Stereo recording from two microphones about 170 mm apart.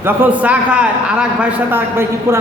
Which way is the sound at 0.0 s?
10° right (ahead or behind).